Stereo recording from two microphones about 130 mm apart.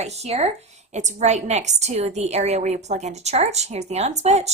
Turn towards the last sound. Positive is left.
turn(degrees=-60)  # may be behind; listen again after turning